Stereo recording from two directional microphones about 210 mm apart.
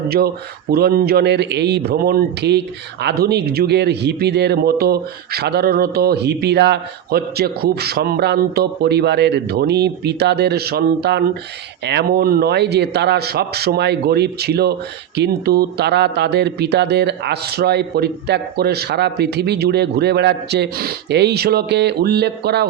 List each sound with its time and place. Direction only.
0.7 s speech: 45° right (ahead or behind)